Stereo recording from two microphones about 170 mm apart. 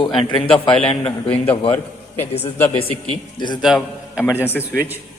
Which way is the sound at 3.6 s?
Centre (ahead or behind).